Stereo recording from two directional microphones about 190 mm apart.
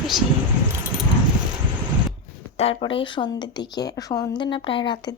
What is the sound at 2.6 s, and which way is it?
A woman's voice, 30° left (ahead or behind).